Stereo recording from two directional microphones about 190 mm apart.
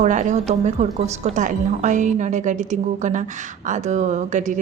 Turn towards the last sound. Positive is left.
turn(degrees=-40)  # may be behind; listen again after turning